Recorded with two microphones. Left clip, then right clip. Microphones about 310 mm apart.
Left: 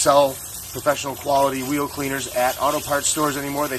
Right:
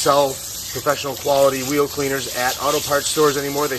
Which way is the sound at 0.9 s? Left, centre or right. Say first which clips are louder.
Right 1 dB; centre.